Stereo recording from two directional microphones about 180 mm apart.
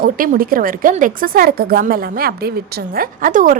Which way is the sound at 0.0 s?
50° right (ahead or behind).